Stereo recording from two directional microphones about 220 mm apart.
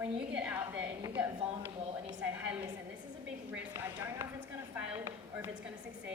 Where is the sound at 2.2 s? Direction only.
5° right (ahead or behind).